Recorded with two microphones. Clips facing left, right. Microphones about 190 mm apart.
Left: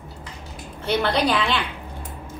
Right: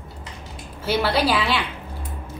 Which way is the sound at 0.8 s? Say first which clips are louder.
Even; 5° right (ahead or behind).